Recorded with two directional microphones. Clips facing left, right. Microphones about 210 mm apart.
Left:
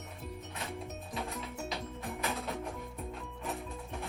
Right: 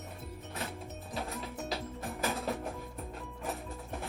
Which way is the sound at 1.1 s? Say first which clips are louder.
Right 2 dB; centre (ahead or behind).